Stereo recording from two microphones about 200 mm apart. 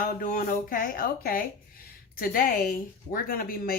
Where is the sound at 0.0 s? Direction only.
45° left (ahead or behind).